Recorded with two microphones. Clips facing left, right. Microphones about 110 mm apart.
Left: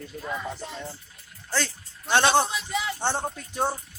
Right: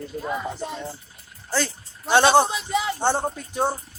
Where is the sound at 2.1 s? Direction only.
10° right (ahead or behind).